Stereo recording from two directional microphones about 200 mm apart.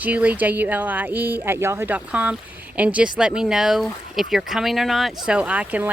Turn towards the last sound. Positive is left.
turn(degrees=-5)  # may be behind; listen again after turning